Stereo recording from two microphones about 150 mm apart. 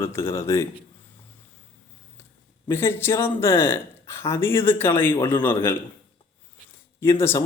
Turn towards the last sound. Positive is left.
turn(degrees=20)  # may be behind; listen again after turning